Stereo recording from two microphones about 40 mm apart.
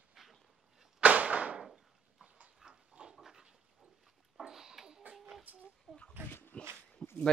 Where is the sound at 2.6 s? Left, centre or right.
Right.